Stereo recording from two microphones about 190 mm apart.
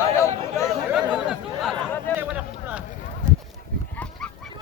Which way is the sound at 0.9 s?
Centre (ahead or behind).